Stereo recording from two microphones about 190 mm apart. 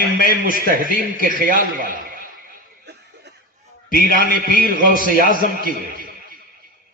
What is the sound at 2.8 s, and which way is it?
Chuckle, 60° right (ahead or behind).